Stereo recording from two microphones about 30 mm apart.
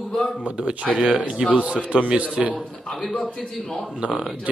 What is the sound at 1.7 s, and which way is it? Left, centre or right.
Speech, right.